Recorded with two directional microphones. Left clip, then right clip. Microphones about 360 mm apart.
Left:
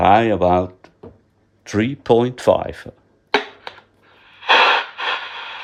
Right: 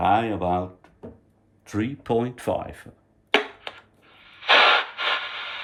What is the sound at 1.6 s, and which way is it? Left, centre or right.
Speech, centre.